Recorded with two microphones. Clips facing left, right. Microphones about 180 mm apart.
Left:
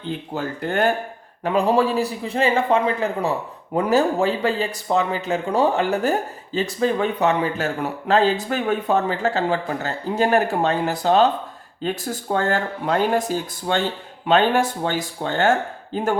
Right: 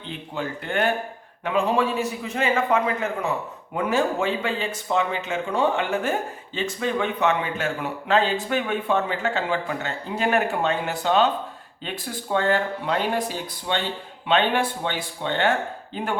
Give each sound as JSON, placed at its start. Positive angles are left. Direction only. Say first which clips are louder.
{"t": 0.3, "sound": "speech", "louder": "left 3 dB", "side_deg": 40}